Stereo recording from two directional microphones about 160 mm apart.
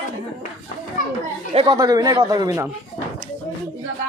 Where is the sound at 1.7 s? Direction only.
20° right (ahead or behind).